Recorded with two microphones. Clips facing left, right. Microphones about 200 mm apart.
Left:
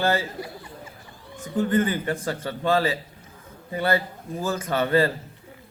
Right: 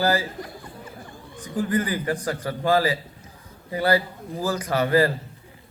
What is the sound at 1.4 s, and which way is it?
A man's voice, 25° left (ahead or behind).